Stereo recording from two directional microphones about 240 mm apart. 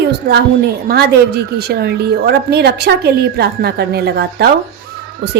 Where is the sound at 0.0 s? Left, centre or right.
Right.